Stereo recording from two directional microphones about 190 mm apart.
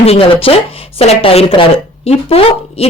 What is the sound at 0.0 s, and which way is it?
A woman's voice, 30° left (ahead or behind).